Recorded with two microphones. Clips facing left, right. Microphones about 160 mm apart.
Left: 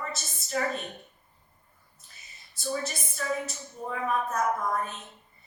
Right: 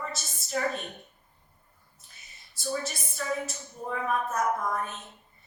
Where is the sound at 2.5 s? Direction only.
Centre (ahead or behind).